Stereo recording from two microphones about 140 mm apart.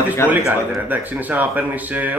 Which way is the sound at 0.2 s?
15° left (ahead or behind).